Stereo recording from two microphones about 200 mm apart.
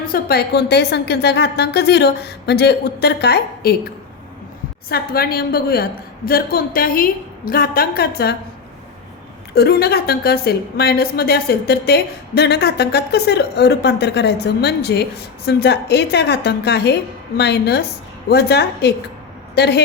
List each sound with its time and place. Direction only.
0.1 s a woman's voice: 50° left (ahead or behind)
4.9 s a woman's voice: 50° left (ahead or behind)
9.6 s a woman's voice: 50° left (ahead or behind)